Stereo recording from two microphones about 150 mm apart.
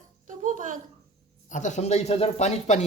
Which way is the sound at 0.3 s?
60° right (ahead or behind).